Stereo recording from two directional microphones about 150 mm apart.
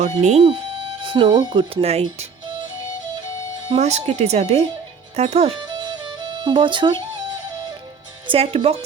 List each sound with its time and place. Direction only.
0.2 s speech: 45° right (ahead or behind)
3.8 s speech: 45° right (ahead or behind)
6.4 s speech: 30° right (ahead or behind)
8.3 s speech: 40° right (ahead or behind)